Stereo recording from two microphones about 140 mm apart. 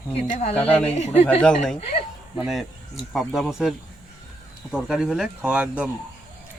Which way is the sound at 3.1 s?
Centre (ahead or behind).